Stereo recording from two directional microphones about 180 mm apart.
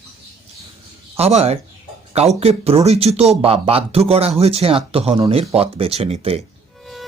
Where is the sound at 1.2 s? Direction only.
35° right (ahead or behind).